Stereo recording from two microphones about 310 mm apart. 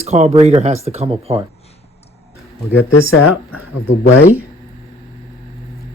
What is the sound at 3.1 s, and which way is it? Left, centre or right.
Speech, left.